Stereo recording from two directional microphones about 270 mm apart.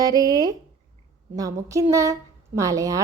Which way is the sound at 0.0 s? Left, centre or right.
Centre.